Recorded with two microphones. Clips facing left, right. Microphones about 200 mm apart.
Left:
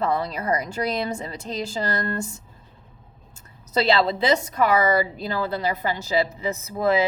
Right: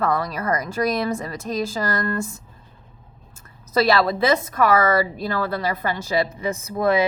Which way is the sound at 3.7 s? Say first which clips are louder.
Right 2 dB; 20° left (ahead or behind).